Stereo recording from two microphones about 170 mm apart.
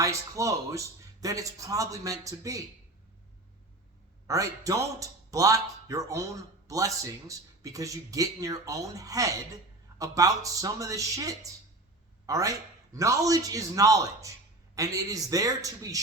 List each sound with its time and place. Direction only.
0.0 s speech: 20° right (ahead or behind)
4.3 s speech: 20° right (ahead or behind)